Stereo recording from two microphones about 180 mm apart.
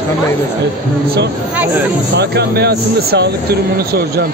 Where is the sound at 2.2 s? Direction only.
65° right (ahead or behind).